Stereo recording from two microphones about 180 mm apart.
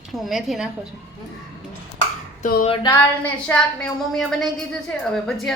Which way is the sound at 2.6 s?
25° left (ahead or behind).